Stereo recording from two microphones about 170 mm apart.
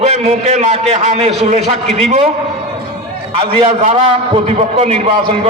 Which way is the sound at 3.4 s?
35° right (ahead or behind).